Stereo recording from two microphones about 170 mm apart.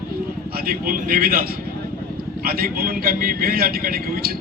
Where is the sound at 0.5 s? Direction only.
60° right (ahead or behind).